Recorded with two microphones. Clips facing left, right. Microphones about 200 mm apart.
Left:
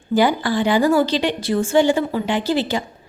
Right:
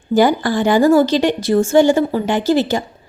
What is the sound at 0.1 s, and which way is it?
A woman's voice, 45° right (ahead or behind).